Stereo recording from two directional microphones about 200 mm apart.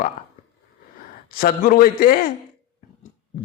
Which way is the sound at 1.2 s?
45° left (ahead or behind).